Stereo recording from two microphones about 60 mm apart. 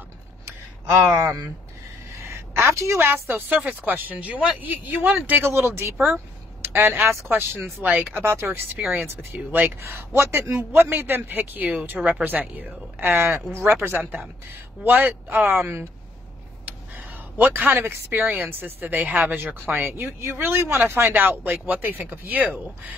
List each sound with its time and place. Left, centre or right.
2.1 s a sound: right
3.1 s speech: right
5.4 s speech: right
8.2 s speech: right
13.8 s speech: right
16.6 s a sound: right
18.3 s speech: right
22.4 s speech: right